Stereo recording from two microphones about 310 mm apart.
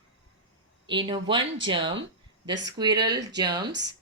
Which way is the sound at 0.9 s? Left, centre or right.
Centre.